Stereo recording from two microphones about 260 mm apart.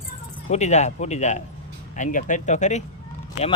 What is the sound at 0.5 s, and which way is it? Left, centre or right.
Speech, left.